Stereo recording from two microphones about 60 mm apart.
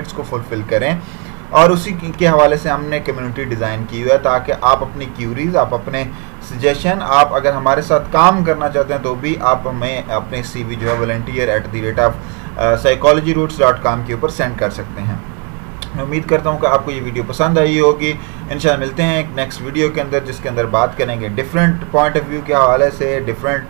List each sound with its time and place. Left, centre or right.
0.7 s speech: centre
16.0 s speech: centre
21.1 s speech: centre
22.1 s speech: centre